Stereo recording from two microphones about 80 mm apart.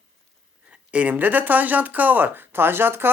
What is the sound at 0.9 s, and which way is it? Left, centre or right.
Speech, centre.